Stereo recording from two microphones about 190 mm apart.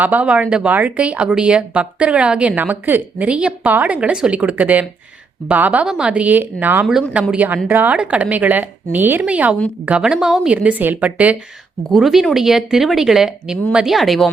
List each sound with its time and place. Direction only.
0.0 s speech: 5° right (ahead or behind)